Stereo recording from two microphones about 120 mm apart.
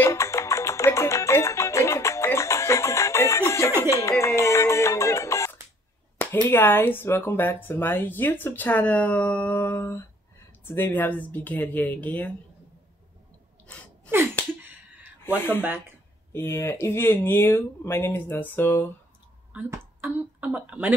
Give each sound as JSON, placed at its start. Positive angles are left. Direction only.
{"t": 0.0, "sound": "music", "side_deg": 25}
{"t": 6.4, "sound": "speech", "side_deg": 20}
{"t": 15.2, "sound": "speech", "side_deg": 15}
{"t": 20.0, "sound": "speech", "side_deg": -15}